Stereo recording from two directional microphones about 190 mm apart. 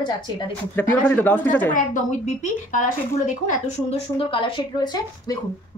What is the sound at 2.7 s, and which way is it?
A woman's voice, 40° left (ahead or behind).